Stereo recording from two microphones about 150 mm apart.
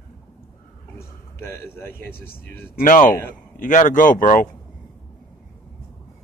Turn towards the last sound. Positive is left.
turn(degrees=60)  # may be behind; listen again after turning